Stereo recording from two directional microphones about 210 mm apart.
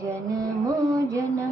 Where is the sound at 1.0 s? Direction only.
15° right (ahead or behind).